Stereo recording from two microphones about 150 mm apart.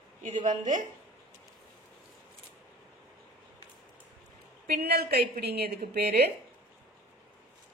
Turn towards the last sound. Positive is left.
turn(degrees=-90)